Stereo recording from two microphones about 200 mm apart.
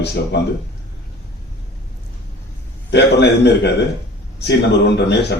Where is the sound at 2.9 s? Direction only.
55° left (ahead or behind).